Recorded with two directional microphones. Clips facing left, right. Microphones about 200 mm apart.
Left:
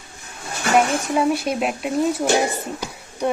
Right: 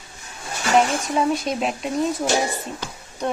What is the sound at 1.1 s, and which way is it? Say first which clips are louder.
Speech: left 2 dB; 5° left (ahead or behind).